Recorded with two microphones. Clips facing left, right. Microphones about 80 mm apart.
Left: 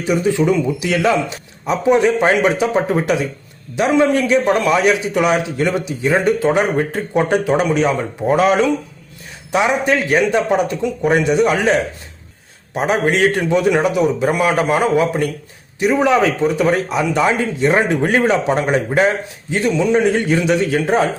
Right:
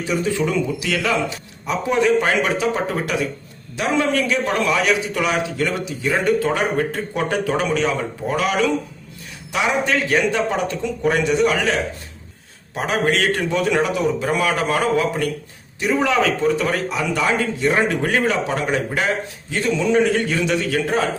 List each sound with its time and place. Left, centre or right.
0.0 s a man's voice: centre